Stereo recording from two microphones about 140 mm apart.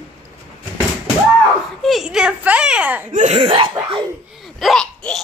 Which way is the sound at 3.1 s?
55° right (ahead or behind).